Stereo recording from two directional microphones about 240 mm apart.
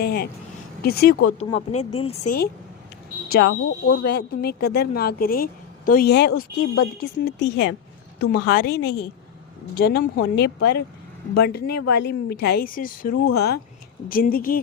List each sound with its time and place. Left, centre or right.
0.0 s speech: left
1.4 s speech: left
3.3 s speech: left
11.7 s a woman's voice: left
11.9 s speech: left